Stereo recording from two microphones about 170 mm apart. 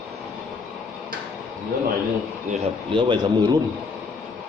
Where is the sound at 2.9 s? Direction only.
30° right (ahead or behind).